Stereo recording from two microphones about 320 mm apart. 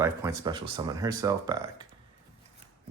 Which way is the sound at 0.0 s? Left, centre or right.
Centre.